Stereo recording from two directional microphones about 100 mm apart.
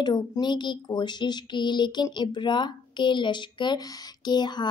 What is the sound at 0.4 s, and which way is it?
Speech, 50° left (ahead or behind).